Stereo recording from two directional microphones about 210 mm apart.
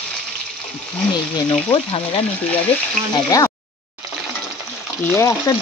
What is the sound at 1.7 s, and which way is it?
Frying, 25° left (ahead or behind).